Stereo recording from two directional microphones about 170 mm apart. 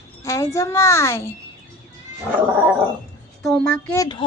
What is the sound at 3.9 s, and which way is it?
Speech, 25° left (ahead or behind).